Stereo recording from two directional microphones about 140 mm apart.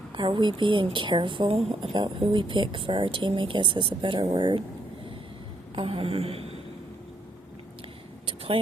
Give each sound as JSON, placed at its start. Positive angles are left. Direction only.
{"t": 0.1, "sound": "speech", "side_deg": -35}
{"t": 5.7, "sound": "a man's voice", "side_deg": -40}